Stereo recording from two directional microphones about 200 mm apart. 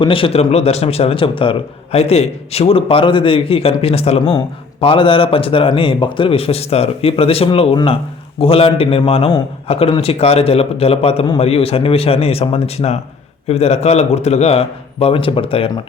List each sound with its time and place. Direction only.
0.0 s a man's voice: 25° left (ahead or behind)